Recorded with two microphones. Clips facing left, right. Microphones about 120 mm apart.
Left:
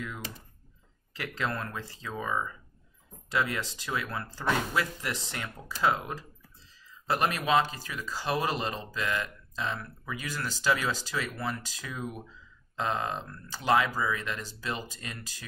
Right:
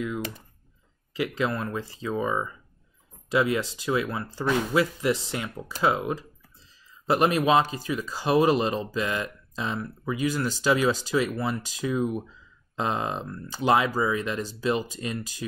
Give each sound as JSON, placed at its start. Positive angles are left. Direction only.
{"t": 1.1, "sound": "speech", "side_deg": -15}